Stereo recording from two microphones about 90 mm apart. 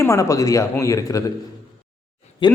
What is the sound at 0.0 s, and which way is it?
A man's voice, 35° left (ahead or behind).